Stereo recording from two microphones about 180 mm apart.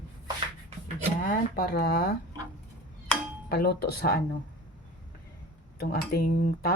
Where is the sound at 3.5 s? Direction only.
60° left (ahead or behind).